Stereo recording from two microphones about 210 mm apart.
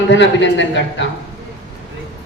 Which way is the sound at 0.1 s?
60° left (ahead or behind).